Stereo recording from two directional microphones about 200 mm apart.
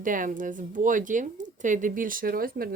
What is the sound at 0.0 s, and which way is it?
Speech, 40° right (ahead or behind).